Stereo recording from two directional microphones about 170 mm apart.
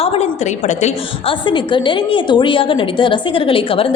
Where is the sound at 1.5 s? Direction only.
30° left (ahead or behind).